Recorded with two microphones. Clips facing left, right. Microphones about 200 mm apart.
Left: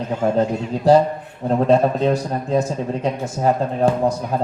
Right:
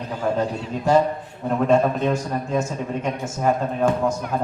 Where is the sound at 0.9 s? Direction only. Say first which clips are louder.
Left 4 dB; 35° left (ahead or behind).